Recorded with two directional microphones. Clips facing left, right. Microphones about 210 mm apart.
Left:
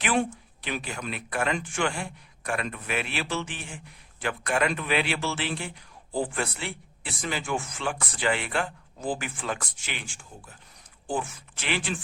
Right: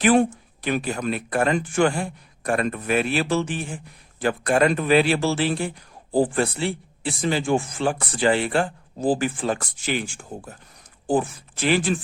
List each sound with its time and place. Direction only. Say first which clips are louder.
0.0 s a man's voice: right 9 dB; 40° right (ahead or behind)